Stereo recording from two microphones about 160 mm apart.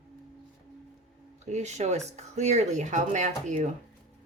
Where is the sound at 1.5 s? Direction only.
45° right (ahead or behind).